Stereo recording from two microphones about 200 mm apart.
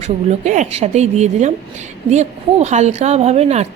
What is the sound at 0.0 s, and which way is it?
A woman's voice, 35° right (ahead or behind).